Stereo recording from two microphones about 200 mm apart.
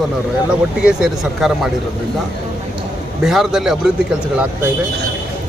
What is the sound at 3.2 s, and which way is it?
Speech, centre (ahead or behind).